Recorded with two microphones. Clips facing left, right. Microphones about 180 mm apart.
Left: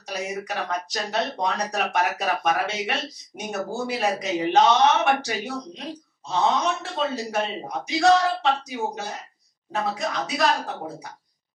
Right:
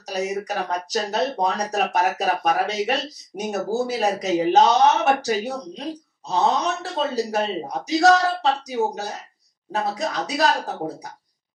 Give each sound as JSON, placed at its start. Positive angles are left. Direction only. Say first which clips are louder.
{"t": 0.0, "sound": "speech", "louder": "right 5 dB", "side_deg": -40}